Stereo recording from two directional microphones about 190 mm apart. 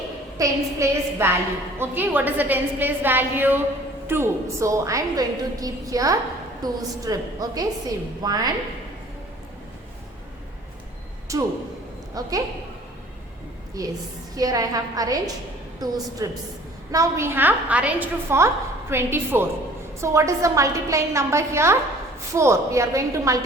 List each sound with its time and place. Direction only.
0.3 s a woman's voice: 15° right (ahead or behind)
11.3 s a woman's voice: 15° right (ahead or behind)
13.8 s a woman's voice: 20° right (ahead or behind)